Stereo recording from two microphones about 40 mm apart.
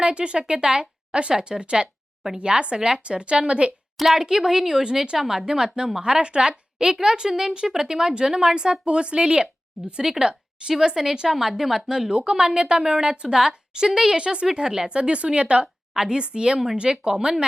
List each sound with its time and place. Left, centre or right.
0.0 s speech: right
3.9 s a woman's voice: centre; by 17.3 s right